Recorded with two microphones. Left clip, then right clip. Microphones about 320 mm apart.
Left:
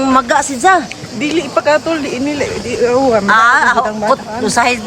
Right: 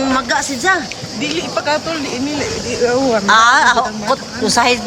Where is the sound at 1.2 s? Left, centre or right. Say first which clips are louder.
Left 5 dB; left.